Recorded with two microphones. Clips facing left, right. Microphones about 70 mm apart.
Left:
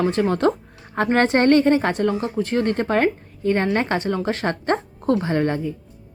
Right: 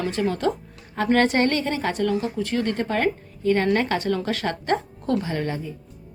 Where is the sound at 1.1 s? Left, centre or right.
Left.